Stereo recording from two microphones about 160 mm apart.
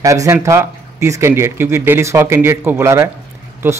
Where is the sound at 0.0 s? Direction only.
20° right (ahead or behind).